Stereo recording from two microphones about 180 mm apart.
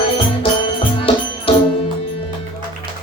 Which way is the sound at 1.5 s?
30° left (ahead or behind).